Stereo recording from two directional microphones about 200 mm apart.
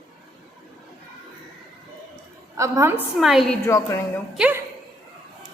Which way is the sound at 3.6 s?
15° left (ahead or behind).